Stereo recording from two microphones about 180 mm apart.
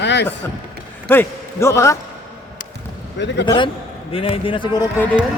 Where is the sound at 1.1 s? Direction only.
15° left (ahead or behind).